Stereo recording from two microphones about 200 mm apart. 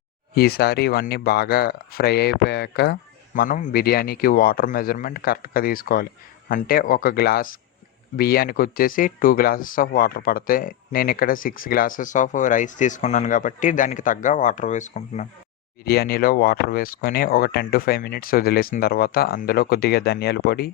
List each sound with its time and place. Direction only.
0.3 s speech: 50° left (ahead or behind)
15.8 s speech: 50° left (ahead or behind)